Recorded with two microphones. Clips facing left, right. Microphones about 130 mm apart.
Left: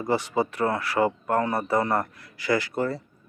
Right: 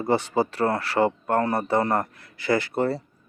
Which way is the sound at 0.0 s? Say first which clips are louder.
Right 2 dB; 30° right (ahead or behind).